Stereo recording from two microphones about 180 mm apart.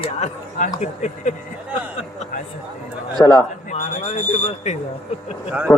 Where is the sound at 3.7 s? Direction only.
40° left (ahead or behind).